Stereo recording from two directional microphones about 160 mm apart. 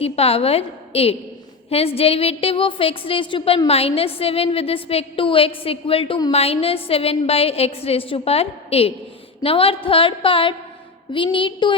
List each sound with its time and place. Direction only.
0.0 s a woman's voice: 40° left (ahead or behind)